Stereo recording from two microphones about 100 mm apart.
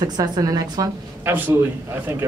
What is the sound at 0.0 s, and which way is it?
Speech, 40° right (ahead or behind).